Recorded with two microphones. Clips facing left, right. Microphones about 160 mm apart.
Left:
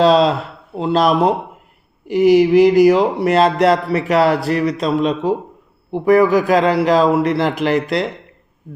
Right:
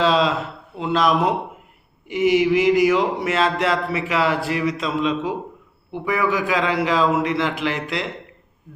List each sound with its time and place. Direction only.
0.0 s speech: 40° left (ahead or behind)